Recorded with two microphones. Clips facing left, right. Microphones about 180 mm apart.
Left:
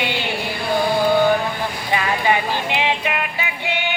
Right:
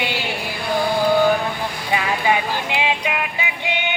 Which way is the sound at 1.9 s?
10° right (ahead or behind).